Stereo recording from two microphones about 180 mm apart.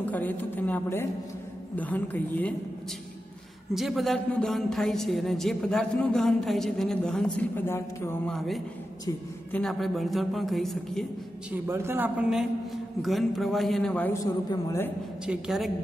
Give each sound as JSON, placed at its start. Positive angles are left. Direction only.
{"t": 0.0, "sound": "a woman's voice", "side_deg": 10}
{"t": 3.7, "sound": "a woman's voice", "side_deg": 0}
{"t": 8.3, "sound": "a woman's voice", "side_deg": 0}
{"t": 11.5, "sound": "a woman's voice", "side_deg": -15}
{"t": 15.2, "sound": "a woman's voice", "side_deg": 0}